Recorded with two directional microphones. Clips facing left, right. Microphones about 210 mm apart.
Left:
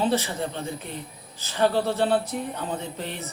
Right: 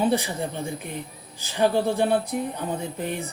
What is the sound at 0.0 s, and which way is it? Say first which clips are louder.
Speech: right 1 dB; 15° right (ahead or behind).